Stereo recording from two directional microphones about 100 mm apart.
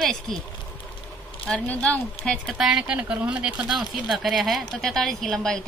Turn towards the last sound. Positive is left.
turn(degrees=5)  # may be behind; listen again after turning